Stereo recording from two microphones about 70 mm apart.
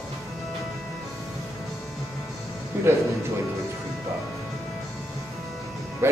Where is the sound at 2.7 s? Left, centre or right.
Right.